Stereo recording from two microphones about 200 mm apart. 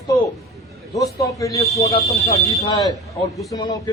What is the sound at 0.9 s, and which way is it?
A man's voice, 15° left (ahead or behind).